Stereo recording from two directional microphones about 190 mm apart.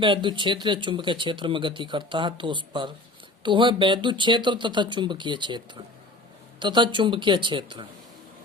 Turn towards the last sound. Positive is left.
turn(degrees=-25)  # may be behind; listen again after turning